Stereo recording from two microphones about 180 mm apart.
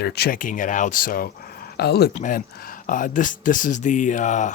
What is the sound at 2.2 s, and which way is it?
Speech, 50° left (ahead or behind).